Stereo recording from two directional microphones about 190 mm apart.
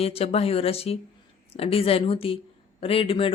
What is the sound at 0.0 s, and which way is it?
Speech, 30° left (ahead or behind).